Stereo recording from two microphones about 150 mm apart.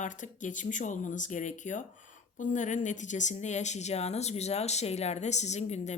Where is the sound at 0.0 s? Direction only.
55° left (ahead or behind).